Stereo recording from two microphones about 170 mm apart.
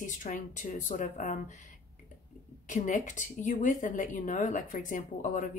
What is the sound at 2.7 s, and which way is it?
A woman's voice, 45° left (ahead or behind).